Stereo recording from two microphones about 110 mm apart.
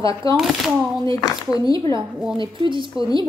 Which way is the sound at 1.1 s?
35° left (ahead or behind).